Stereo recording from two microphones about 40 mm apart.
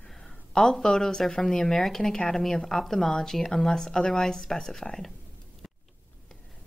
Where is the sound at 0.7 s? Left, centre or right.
Centre.